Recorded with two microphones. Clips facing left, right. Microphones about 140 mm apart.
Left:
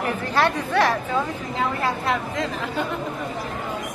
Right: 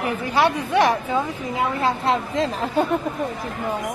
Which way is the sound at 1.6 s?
25° right (ahead or behind).